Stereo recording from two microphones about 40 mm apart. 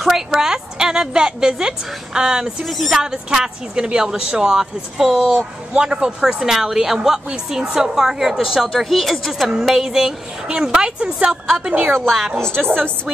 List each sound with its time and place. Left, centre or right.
0.0 s a woman's voice: centre
2.6 s speech: centre
3.0 s a woman's voice: centre
6.2 s a woman's voice: centre
11.5 s a woman's voice: right
12.4 s a woman's voice: left